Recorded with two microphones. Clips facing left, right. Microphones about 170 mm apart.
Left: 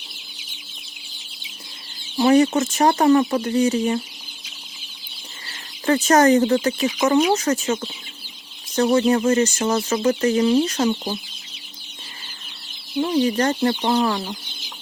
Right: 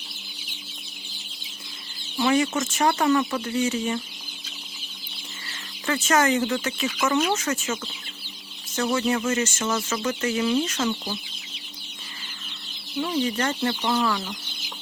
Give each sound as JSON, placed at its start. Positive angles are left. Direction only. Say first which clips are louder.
{"t": 2.1, "sound": "speech", "louder": "left 7 dB", "side_deg": 35}
{"t": 5.5, "sound": "speech", "louder": "left 8 dB", "side_deg": 35}
{"t": 13.0, "sound": "speech", "louder": "left 6 dB", "side_deg": 35}